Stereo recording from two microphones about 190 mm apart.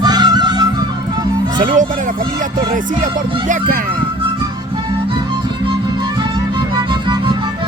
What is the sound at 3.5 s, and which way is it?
Speech, 45° right (ahead or behind).